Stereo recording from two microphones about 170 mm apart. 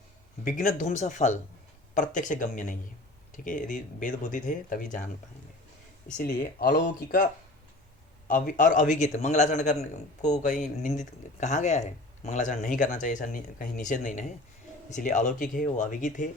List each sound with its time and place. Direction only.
0.4 s a man's voice: 50° left (ahead or behind)
6.2 s speech: 65° left (ahead or behind)
6.7 s a man's voice: 55° left (ahead or behind)
8.3 s a man's voice: 50° left (ahead or behind)